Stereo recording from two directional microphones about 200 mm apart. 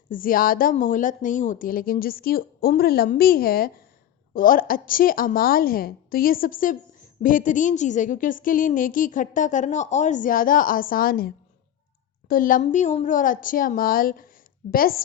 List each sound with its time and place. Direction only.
0.1 s a woman's voice: 45° left (ahead or behind)
12.3 s speech: 45° left (ahead or behind)